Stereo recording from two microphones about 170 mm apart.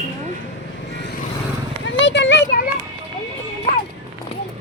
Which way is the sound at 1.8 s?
90° left.